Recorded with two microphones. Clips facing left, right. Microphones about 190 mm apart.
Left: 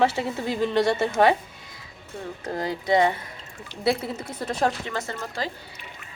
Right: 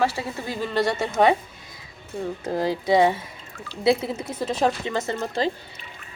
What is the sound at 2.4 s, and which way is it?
Speech, 5° right (ahead or behind).